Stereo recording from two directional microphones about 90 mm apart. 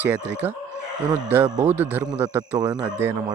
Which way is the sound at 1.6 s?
20° right (ahead or behind).